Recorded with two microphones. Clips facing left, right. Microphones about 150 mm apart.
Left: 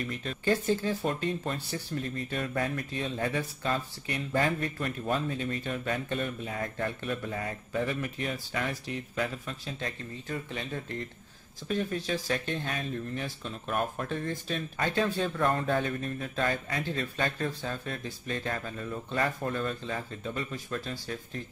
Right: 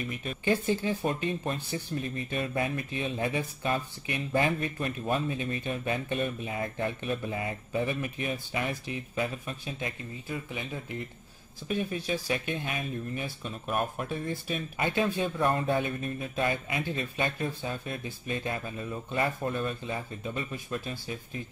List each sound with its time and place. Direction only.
0.0 s speech: 15° right (ahead or behind)